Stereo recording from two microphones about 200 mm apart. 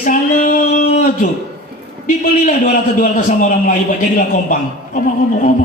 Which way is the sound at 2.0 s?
40° left (ahead or behind).